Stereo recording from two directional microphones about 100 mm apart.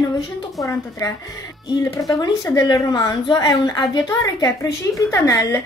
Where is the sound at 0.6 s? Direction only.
30° left (ahead or behind).